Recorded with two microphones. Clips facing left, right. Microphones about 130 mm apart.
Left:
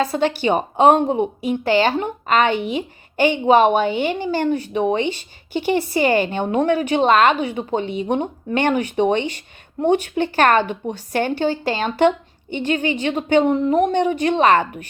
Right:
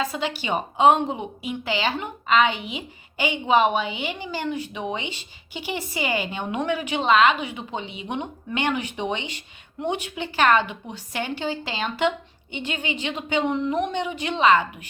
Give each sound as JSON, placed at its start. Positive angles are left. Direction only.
{"t": 0.4, "sound": "a woman's voice", "side_deg": 45}